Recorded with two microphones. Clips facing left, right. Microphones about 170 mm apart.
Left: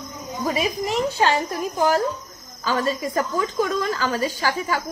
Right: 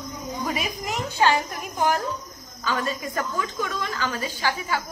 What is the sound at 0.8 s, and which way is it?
A woman's voice, 35° left (ahead or behind).